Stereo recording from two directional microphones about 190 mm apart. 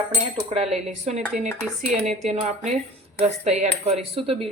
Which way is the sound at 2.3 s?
35° right (ahead or behind).